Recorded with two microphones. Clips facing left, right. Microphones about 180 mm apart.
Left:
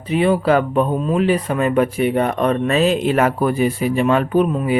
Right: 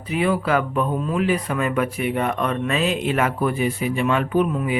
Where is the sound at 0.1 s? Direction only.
30° left (ahead or behind).